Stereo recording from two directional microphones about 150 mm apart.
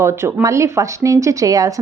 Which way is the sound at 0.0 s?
15° right (ahead or behind).